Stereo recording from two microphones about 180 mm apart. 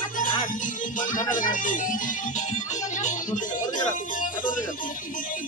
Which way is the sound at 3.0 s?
45° left (ahead or behind).